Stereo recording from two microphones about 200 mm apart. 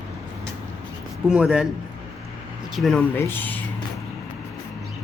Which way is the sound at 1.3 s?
Centre (ahead or behind).